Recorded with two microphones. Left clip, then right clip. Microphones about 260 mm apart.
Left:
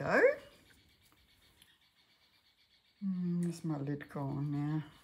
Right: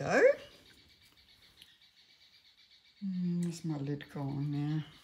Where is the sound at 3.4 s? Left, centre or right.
Centre.